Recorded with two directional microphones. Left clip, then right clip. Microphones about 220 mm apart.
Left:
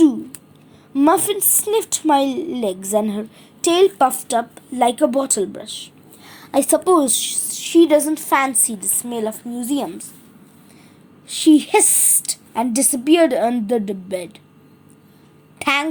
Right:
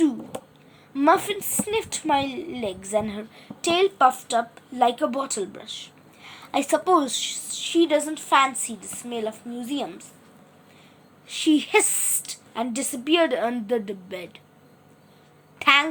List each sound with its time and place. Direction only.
0.9 s a woman's voice: 20° left (ahead or behind)
6.2 s a sound: centre (ahead or behind)
6.5 s a woman's voice: 20° left (ahead or behind)
11.3 s a woman's voice: 25° left (ahead or behind)
15.5 s speech: 30° left (ahead or behind)